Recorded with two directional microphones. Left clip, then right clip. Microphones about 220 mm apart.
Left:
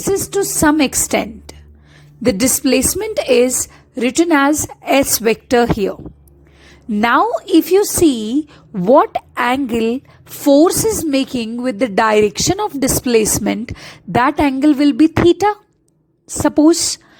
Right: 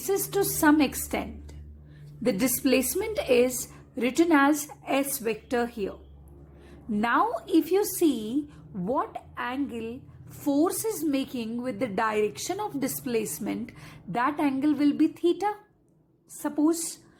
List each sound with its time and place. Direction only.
0.1 s a woman's voice: 30° left (ahead or behind)